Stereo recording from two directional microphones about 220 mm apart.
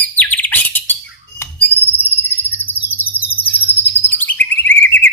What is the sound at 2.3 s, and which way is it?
Bird vocalization, 10° left (ahead or behind).